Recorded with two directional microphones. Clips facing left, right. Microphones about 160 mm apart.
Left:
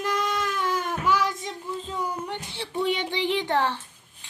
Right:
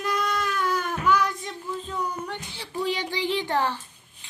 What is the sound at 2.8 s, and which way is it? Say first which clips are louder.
Speech: left 1 dB; 20° left (ahead or behind).